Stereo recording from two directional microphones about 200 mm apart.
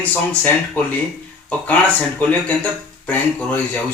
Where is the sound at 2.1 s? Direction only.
5° left (ahead or behind).